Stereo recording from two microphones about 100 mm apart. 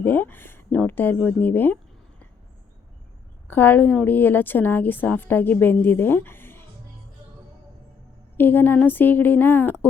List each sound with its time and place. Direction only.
0.0 s a sound: 20° left (ahead or behind)
3.5 s a woman's voice: 20° left (ahead or behind)
8.4 s a woman's voice: 20° left (ahead or behind)